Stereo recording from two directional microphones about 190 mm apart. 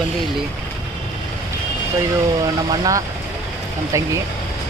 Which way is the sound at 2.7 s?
20° right (ahead or behind).